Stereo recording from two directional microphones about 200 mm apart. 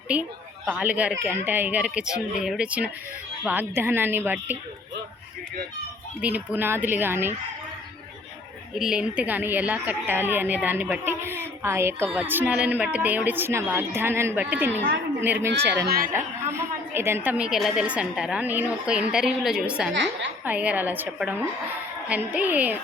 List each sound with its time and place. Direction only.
0.1 s a woman's voice: 5° right (ahead or behind)
6.2 s a woman's voice: 10° right (ahead or behind)
8.7 s a woman's voice: 5° right (ahead or behind)
15.4 s speech: 55° right (ahead or behind)
16.1 s a woman's voice: 10° right (ahead or behind)